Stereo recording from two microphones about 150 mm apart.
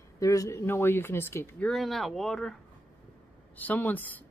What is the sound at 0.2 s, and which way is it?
Speech, 20° left (ahead or behind).